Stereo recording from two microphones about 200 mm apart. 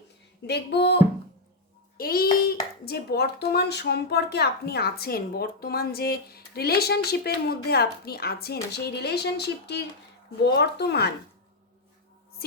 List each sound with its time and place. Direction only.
0.4 s speech: 55° left (ahead or behind)
2.0 s a child's voice: 50° left (ahead or behind)